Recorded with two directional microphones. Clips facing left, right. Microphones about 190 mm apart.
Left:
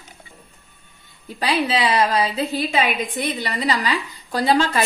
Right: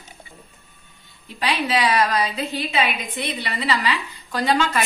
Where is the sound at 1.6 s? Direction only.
30° left (ahead or behind).